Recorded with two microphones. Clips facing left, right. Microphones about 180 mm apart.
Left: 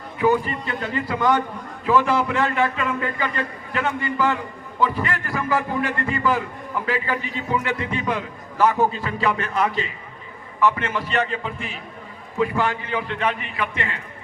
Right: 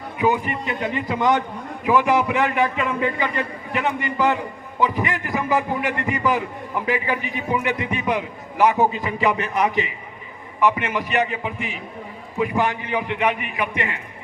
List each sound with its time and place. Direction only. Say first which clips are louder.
0.2 s a man's voice: left 1 dB; 15° right (ahead or behind)